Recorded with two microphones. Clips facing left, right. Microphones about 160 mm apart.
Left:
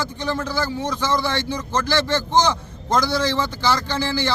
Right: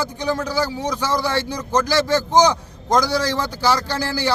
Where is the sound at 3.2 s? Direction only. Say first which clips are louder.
Even; 40° right (ahead or behind).